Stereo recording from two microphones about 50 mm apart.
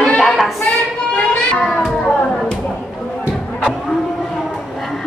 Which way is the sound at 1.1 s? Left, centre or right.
Left.